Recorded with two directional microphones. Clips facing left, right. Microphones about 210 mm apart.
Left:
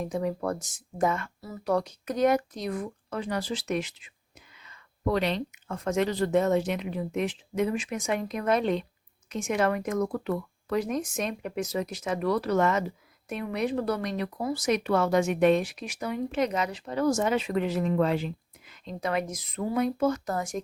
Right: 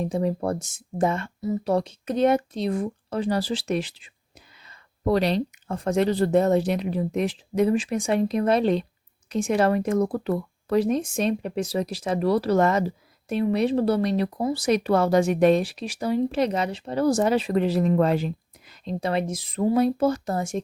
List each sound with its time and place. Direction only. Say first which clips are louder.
0.0 s speech: right 4 dB; 30° right (ahead or behind)